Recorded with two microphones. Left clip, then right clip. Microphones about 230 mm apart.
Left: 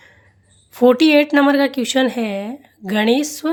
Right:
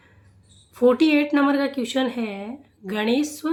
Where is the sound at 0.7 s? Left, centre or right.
Left.